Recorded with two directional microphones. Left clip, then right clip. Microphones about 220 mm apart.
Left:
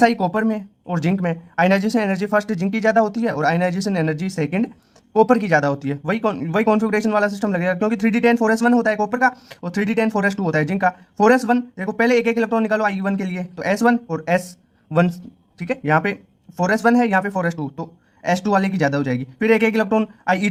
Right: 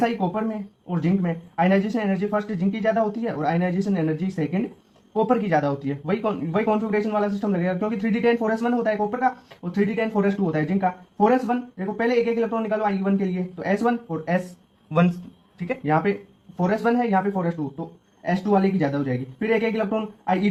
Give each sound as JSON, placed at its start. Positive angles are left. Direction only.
{"t": 0.0, "sound": "speech", "side_deg": 35}